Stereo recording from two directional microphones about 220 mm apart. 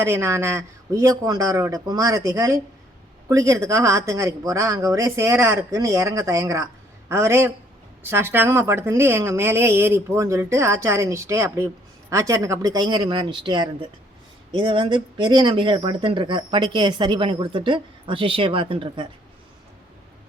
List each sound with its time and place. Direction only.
0.0 s a woman's voice: 10° right (ahead or behind)